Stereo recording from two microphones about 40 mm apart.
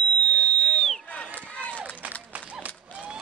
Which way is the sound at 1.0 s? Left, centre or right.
Left.